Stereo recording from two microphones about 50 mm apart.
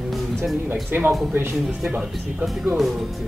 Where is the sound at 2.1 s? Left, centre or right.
Centre.